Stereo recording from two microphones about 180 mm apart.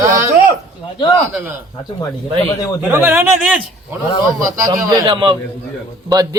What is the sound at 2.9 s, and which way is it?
Speech, 10° right (ahead or behind).